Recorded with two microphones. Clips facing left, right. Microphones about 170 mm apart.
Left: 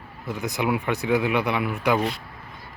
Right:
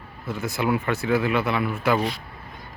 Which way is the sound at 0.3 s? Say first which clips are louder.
Right 1 dB; 15° left (ahead or behind).